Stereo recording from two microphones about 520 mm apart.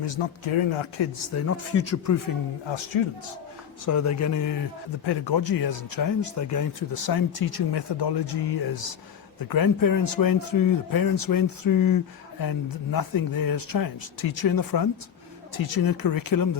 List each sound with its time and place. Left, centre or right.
0.0 s speech: left
1.3 s speech: left
2.6 s speech: left
3.8 s speech: left
5.0 s speech: left
9.5 s speech: left